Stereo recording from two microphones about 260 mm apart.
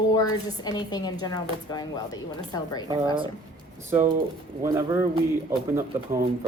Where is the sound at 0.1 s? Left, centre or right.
Centre.